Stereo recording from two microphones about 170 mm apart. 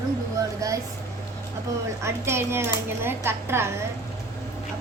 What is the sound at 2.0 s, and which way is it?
Speech, 15° right (ahead or behind).